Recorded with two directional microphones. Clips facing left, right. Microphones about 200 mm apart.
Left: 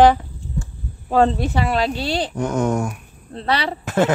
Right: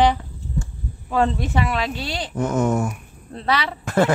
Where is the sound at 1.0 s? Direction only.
35° left (ahead or behind).